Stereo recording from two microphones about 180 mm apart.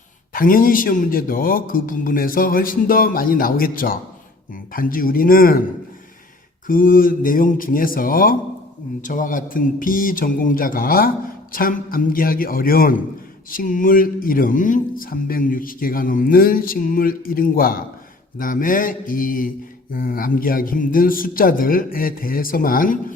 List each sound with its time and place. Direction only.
0.3 s speech: 50° left (ahead or behind)
6.7 s speech: 50° left (ahead or behind)